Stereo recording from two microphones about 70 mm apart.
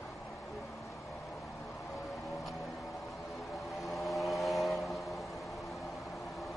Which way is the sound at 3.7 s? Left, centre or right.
Centre.